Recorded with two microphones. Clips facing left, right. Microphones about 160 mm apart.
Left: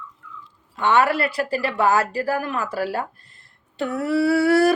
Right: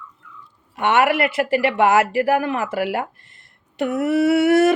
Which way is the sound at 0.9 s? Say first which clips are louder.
Right 2 dB; 20° right (ahead or behind).